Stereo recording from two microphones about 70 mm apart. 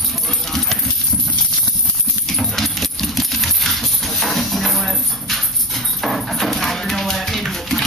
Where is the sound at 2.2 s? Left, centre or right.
Centre.